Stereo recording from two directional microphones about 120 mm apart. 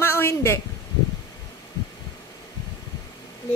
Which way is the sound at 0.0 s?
20° left (ahead or behind).